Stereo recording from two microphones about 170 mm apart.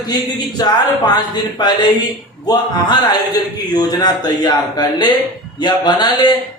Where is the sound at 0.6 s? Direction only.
25° left (ahead or behind).